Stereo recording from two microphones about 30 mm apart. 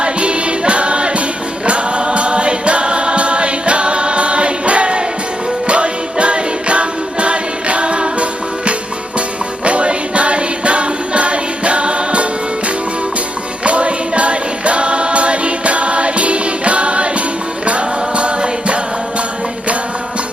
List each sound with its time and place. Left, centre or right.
0.0 s music: right
1.6 s choir: right
5.6 s music: right